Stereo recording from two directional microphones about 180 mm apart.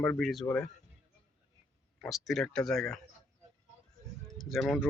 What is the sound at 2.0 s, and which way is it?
Speech, centre (ahead or behind).